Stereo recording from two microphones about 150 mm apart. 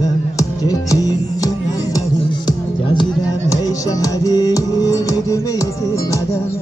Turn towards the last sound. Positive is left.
turn(degrees=20)  # may be behind; listen again after turning